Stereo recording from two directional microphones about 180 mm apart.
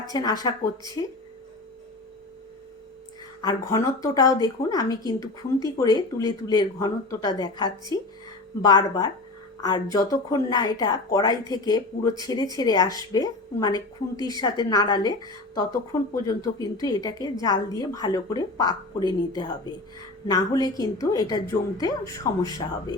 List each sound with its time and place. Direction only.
0.1 s speech: 20° left (ahead or behind)
3.4 s speech: 20° left (ahead or behind)